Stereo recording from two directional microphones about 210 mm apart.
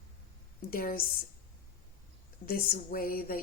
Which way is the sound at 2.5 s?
45° left (ahead or behind).